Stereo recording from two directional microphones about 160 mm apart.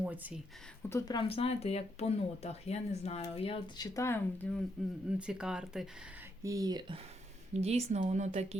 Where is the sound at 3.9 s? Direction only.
15° left (ahead or behind).